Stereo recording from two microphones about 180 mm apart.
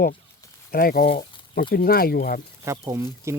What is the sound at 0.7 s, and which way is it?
Speech, 55° left (ahead or behind).